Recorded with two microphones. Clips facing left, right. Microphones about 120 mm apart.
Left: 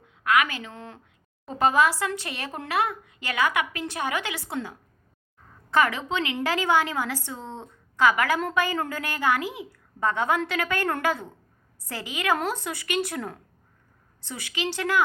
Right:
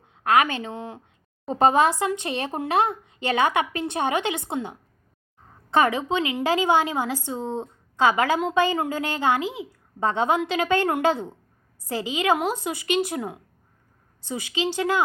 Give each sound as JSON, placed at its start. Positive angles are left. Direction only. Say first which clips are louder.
{"t": 0.1, "sound": "a woman's voice", "louder": "right 3 dB", "side_deg": -30}